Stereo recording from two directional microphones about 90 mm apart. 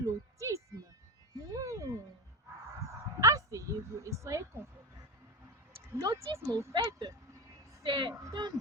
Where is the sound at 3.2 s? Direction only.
35° right (ahead or behind).